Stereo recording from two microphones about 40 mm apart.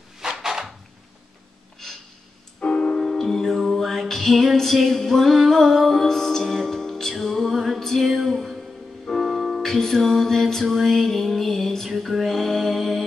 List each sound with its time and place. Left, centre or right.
0.2 s a sound: centre
2.6 s music: left
3.0 s music: centre